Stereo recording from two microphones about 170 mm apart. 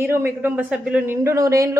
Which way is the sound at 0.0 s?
15° right (ahead or behind).